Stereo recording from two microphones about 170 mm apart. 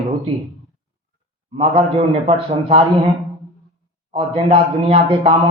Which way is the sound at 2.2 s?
35° right (ahead or behind).